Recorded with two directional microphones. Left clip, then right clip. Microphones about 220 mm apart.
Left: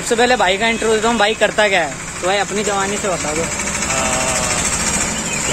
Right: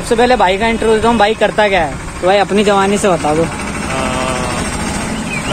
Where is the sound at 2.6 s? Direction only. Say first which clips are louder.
Right 7 dB; 45° right (ahead or behind).